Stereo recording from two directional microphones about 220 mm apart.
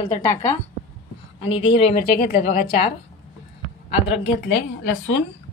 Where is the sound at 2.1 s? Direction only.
45° left (ahead or behind).